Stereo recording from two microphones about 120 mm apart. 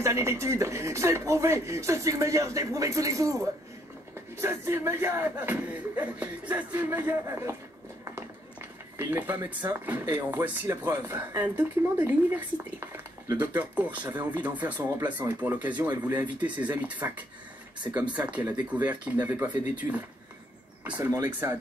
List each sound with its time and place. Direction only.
0.0 s speech: 25° right (ahead or behind)
8.0 s a sound: 20° right (ahead or behind)
9.7 s speech: 15° right (ahead or behind)
18.1 s speech: 15° right (ahead or behind)
21.0 s speech: 25° right (ahead or behind)